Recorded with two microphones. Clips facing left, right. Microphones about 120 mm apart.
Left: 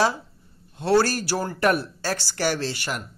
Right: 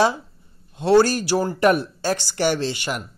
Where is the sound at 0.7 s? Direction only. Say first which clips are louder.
Right 4 dB; 20° right (ahead or behind).